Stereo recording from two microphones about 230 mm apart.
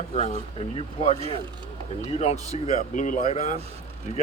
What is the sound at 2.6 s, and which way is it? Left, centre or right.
Speech, left.